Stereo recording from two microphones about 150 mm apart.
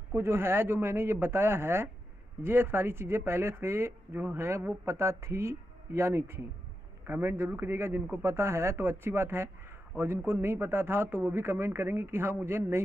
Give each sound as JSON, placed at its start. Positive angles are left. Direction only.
{"t": 0.1, "sound": "speech", "side_deg": -15}